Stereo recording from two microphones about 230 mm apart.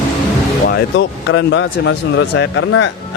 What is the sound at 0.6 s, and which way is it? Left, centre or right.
Speech, left.